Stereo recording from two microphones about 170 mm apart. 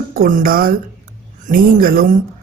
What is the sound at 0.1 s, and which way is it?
A woman's voice, 60° right (ahead or behind).